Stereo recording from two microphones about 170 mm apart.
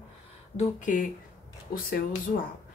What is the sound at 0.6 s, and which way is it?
Speech, 50° left (ahead or behind).